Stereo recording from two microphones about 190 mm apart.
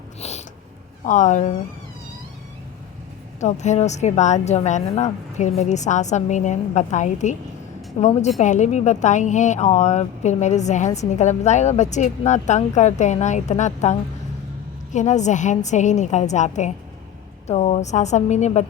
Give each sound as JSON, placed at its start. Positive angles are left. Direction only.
{"t": 0.2, "sound": "a sound", "side_deg": 35}
{"t": 1.0, "sound": "speech", "side_deg": 40}
{"t": 3.4, "sound": "speech", "side_deg": 40}
{"t": 14.9, "sound": "speech", "side_deg": 40}